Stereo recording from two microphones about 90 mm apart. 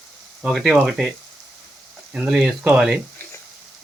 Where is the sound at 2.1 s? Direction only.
10° right (ahead or behind).